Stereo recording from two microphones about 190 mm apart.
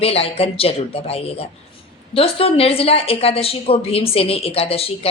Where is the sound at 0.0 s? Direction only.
30° left (ahead or behind).